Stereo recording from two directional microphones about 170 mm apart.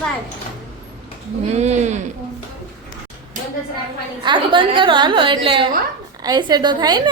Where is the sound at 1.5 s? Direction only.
40° right (ahead or behind).